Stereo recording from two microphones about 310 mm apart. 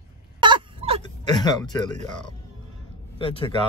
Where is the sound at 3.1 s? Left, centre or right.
Centre.